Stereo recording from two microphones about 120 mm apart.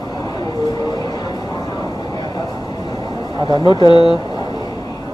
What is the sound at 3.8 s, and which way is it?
Speech, 40° left (ahead or behind).